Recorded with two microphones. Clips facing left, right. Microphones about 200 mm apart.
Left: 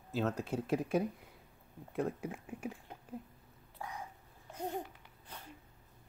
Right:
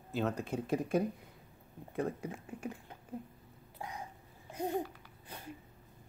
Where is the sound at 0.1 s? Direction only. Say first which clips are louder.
Even; 5° left (ahead or behind).